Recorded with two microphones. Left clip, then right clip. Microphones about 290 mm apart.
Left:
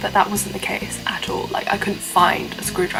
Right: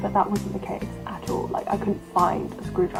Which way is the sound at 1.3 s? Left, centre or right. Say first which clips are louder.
Left 1 dB; right.